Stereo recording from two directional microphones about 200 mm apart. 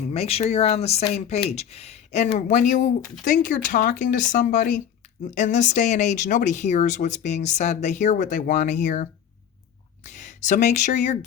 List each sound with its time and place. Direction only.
0.1 s speech: 30° left (ahead or behind)